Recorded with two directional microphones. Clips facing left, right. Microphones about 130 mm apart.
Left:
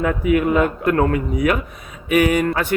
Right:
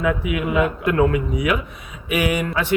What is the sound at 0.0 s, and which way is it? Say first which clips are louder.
Speech: left 4 dB; 45° left (ahead or behind).